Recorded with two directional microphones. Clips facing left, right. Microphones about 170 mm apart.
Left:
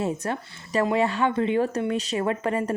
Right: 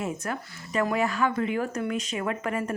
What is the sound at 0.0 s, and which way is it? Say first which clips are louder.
A woman's voice: left 4 dB; 30° left (ahead or behind).